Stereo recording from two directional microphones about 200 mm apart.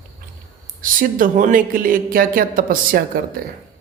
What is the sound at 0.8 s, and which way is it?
A woman's voice, 45° right (ahead or behind).